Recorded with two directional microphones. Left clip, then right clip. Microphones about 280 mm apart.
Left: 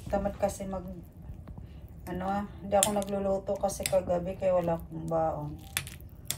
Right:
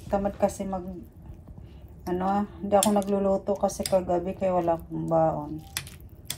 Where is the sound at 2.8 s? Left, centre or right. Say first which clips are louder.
Right 5 dB; centre.